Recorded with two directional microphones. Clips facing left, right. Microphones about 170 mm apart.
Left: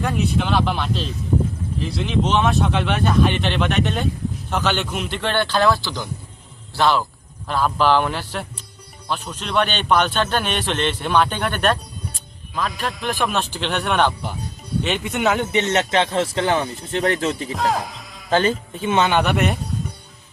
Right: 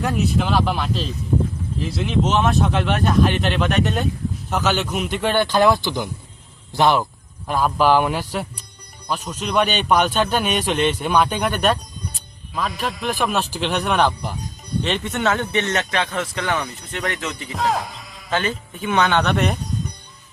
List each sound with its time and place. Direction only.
0.0 s a man's voice: centre (ahead or behind); by 17.5 s 30° left (ahead or behind)
17.5 s speech: centre (ahead or behind)
18.3 s speech: 35° left (ahead or behind)
18.8 s speech: 20° left (ahead or behind); by 19.5 s 5° left (ahead or behind)